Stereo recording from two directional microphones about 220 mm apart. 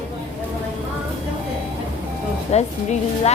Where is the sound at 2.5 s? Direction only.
30° left (ahead or behind).